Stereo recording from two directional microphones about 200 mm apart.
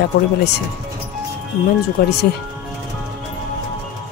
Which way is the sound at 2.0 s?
50° left (ahead or behind).